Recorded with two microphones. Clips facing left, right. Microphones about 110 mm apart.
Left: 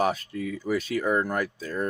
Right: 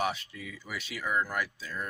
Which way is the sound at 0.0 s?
45° left (ahead or behind).